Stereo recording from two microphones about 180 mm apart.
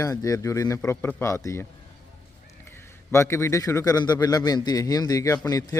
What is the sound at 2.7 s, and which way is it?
A man's voice, 15° left (ahead or behind).